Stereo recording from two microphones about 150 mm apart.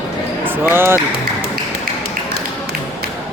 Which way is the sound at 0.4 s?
15° right (ahead or behind).